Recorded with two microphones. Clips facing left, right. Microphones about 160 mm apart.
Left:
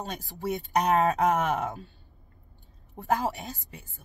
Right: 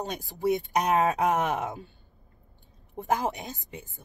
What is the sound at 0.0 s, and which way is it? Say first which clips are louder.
Speech: right 5 dB; 15° right (ahead or behind).